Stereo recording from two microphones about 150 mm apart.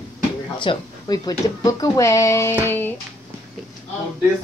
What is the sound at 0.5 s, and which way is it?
Speech, 30° left (ahead or behind).